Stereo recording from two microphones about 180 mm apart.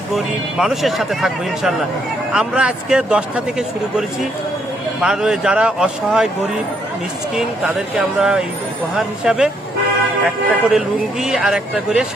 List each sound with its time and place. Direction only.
0.6 s speech: centre (ahead or behind)
4.9 s speech: 5° right (ahead or behind)
7.3 s speech: 5° right (ahead or behind)